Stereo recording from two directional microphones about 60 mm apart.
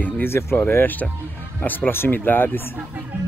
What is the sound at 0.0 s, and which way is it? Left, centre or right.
Speech, left.